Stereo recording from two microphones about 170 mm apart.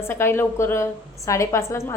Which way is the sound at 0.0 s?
15° left (ahead or behind).